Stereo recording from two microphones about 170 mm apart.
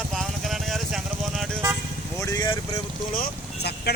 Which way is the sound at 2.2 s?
20° left (ahead or behind).